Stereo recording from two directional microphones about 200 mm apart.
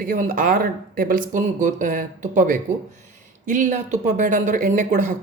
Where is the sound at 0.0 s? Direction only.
40° right (ahead or behind).